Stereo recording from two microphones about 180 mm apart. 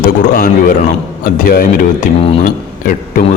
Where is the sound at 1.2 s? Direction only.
55° left (ahead or behind).